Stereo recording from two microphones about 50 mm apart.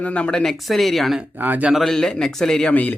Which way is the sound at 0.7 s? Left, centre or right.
Centre.